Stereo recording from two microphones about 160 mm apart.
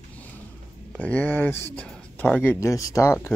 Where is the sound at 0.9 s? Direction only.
10° left (ahead or behind).